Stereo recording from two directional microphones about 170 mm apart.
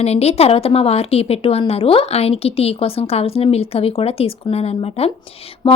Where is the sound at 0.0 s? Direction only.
40° left (ahead or behind).